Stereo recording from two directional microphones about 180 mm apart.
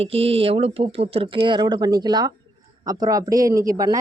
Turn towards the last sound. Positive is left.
turn(degrees=-20)  # may be behind; listen again after turning